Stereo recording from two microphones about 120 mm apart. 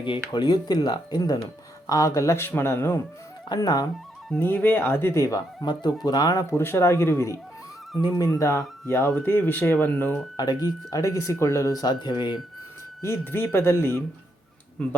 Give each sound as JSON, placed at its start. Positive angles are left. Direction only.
{"t": 0.3, "sound": "speech", "side_deg": 40}
{"t": 3.5, "sound": "speech", "side_deg": 35}
{"t": 4.4, "sound": "speech", "side_deg": 15}
{"t": 10.3, "sound": "speech", "side_deg": 35}
{"t": 13.0, "sound": "speech", "side_deg": 20}